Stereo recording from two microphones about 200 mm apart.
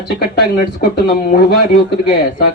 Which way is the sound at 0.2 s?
50° left (ahead or behind).